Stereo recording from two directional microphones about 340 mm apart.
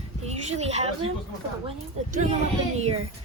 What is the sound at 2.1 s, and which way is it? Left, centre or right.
Speech, centre.